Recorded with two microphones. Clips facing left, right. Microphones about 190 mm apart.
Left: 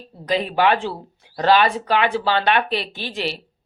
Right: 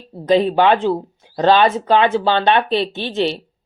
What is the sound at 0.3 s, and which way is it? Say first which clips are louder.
Speech: right 5 dB; 25° right (ahead or behind).